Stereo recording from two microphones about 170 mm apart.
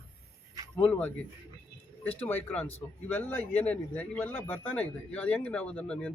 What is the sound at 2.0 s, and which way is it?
Speech, 10° left (ahead or behind).